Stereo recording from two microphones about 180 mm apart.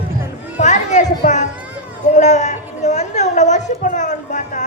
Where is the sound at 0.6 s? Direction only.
40° left (ahead or behind).